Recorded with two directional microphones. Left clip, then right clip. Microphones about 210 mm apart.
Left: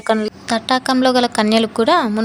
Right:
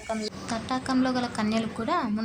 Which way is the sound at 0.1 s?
45° left (ahead or behind).